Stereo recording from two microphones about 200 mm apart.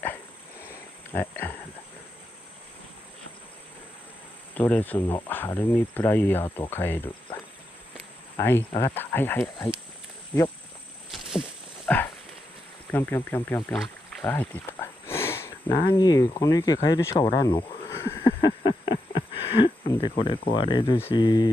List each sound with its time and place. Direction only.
1.1 s speech: 10° left (ahead or behind)
4.6 s speech: 10° left (ahead or behind)
8.4 s speech: 10° left (ahead or behind)
11.1 s a sound: centre (ahead or behind)
12.9 s speech: 10° left (ahead or behind)
14.2 s a sound: 10° left (ahead or behind)
15.9 s cricket: 20° left (ahead or behind)
19.9 s speech: 25° left (ahead or behind)